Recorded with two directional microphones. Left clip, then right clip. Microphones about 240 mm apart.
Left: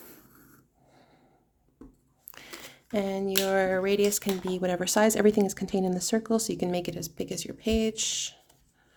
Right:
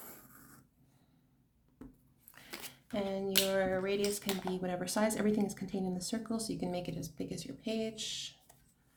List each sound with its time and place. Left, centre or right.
2.9 s speech: left